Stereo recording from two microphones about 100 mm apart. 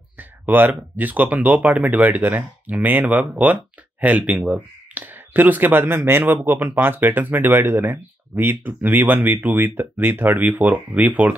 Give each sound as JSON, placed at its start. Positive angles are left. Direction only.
{"t": 0.2, "sound": "speech", "side_deg": -20}